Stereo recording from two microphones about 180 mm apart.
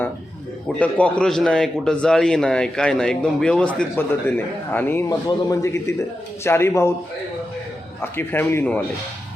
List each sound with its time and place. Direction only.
0.8 s a man's voice: 5° left (ahead or behind)
8.0 s speech: 10° left (ahead or behind)